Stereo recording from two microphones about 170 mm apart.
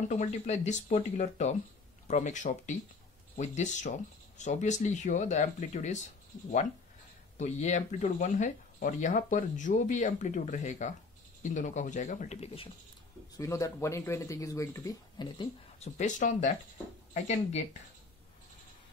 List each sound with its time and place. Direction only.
0.1 s speech: 45° left (ahead or behind)
7.3 s speech: 40° left (ahead or behind)
13.4 s speech: 20° left (ahead or behind)
15.8 s speech: 45° left (ahead or behind)